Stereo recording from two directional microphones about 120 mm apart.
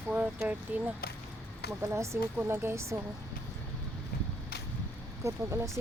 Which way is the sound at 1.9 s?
25° right (ahead or behind).